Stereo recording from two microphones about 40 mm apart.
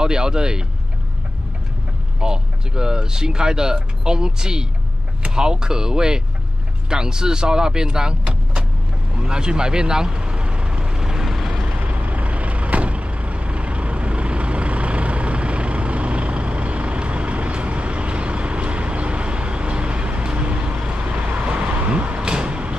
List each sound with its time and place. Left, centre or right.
0.0 s speech: centre
2.1 s speech: centre
9.1 s vehicle: right
11.6 s vehicle: right